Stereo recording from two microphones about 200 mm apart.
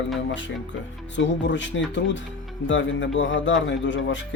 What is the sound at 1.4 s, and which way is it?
A man's voice, 65° left (ahead or behind).